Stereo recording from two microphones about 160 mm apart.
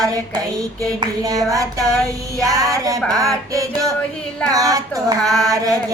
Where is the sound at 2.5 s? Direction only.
20° right (ahead or behind).